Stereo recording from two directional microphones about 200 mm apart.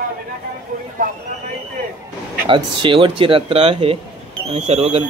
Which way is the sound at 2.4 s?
25° right (ahead or behind).